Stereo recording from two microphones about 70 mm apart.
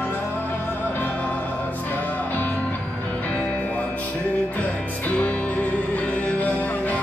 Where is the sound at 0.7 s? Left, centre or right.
Left.